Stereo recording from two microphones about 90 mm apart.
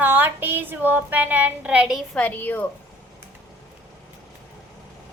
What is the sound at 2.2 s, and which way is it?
Speech, 20° left (ahead or behind).